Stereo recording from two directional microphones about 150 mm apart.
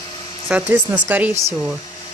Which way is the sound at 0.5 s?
10° right (ahead or behind).